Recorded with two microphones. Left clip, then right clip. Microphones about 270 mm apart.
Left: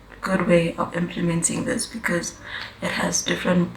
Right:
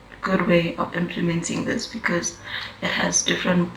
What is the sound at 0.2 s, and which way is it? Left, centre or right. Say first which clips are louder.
Speech: left 1 dB; centre.